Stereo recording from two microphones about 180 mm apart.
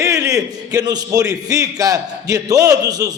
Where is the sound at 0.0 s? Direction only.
20° right (ahead or behind).